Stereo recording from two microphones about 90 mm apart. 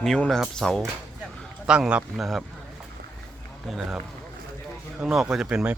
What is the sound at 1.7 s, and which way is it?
Speech, 10° right (ahead or behind).